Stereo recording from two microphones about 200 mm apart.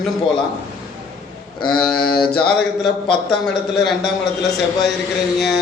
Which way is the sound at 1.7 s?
50° left (ahead or behind).